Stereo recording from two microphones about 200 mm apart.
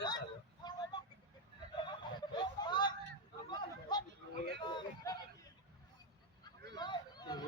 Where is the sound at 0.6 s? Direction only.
20° left (ahead or behind).